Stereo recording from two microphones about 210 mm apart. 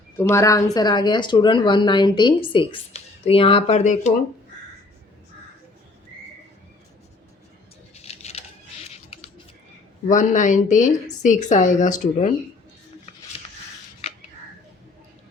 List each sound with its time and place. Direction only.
0.2 s a woman's voice: 10° left (ahead or behind); by 4.1 s 30° left (ahead or behind)
7.9 s a sound: 30° left (ahead or behind)
10.1 s a woman's voice: 35° left (ahead or behind)